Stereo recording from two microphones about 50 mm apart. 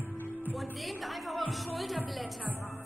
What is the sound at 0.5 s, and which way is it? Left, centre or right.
A woman's voice, centre.